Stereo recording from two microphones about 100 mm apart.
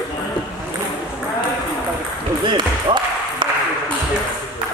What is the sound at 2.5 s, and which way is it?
Basketball bounce, 55° right (ahead or behind).